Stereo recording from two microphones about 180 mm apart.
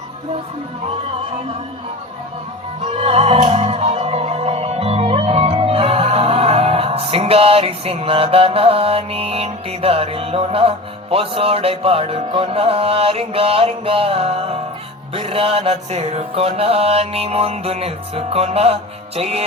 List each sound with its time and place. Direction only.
2.8 s music: 35° right (ahead or behind)